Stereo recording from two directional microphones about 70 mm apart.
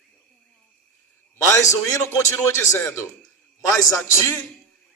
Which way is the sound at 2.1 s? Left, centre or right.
Left.